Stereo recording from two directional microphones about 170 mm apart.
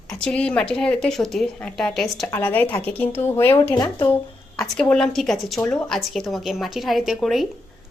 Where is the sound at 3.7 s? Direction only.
25° left (ahead or behind).